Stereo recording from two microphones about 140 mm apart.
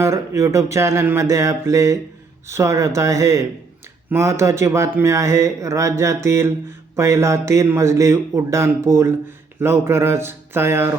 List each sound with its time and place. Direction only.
0.0 s a man's voice: 20° right (ahead or behind)